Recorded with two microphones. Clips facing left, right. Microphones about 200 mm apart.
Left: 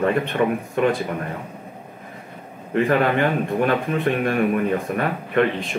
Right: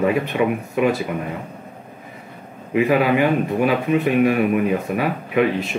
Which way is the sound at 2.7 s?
5° right (ahead or behind).